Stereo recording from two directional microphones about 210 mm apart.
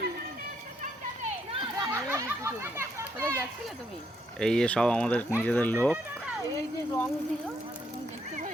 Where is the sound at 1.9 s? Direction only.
10° right (ahead or behind).